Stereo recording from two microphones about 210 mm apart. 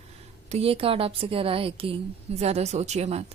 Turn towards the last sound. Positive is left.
turn(degrees=-30)  # may be behind; listen again after turning